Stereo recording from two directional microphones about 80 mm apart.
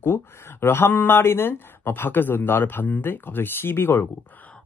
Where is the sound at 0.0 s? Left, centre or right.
Left.